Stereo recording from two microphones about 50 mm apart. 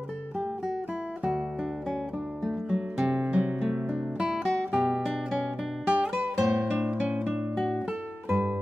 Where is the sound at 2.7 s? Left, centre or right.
Centre.